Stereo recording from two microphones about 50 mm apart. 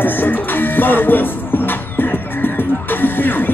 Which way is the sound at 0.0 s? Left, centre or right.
Left.